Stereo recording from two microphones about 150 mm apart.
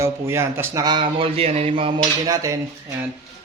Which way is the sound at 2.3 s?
20° right (ahead or behind).